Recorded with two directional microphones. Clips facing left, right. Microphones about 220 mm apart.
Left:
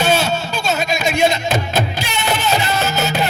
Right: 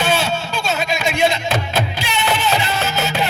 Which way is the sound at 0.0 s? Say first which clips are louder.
Left 2 dB; 40° left (ahead or behind).